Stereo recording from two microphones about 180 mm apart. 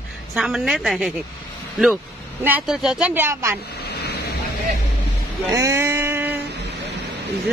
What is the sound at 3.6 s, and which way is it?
Vehicle, 65° left (ahead or behind).